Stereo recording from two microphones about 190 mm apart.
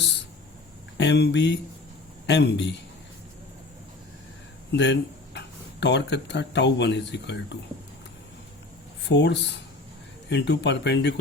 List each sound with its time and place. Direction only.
0.9 s speech: 65° left (ahead or behind)
4.7 s speech: 65° left (ahead or behind)
9.0 s speech: 70° left (ahead or behind)